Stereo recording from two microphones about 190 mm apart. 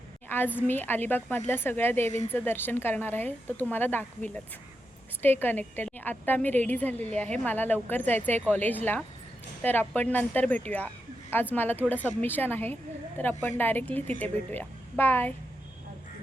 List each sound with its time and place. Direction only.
0.3 s a woman's voice: 10° left (ahead or behind)